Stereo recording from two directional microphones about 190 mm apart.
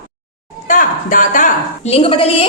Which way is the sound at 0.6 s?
45° left (ahead or behind).